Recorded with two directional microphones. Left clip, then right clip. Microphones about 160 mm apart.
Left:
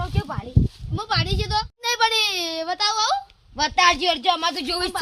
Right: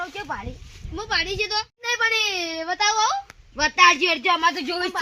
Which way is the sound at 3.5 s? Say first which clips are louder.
Right 2 dB; 50° left (ahead or behind).